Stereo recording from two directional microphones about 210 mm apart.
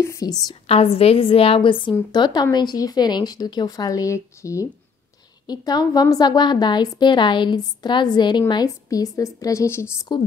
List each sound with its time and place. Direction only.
0.0 s a woman's voice: 15° left (ahead or behind)
0.7 s a woman's voice: 30° left (ahead or behind)